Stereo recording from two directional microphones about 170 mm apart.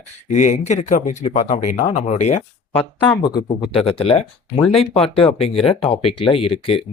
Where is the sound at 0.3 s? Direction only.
45° left (ahead or behind).